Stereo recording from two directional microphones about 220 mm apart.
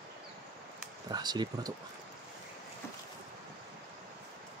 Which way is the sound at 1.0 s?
20° right (ahead or behind).